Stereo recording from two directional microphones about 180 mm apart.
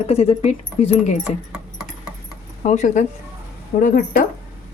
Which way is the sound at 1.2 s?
5° right (ahead or behind).